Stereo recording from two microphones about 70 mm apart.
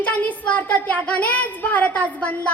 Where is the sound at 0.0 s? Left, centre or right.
Left.